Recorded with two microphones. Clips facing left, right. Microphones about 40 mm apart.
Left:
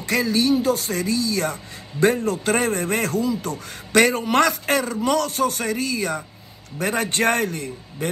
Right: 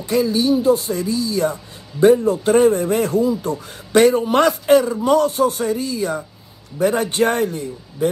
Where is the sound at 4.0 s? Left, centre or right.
Left.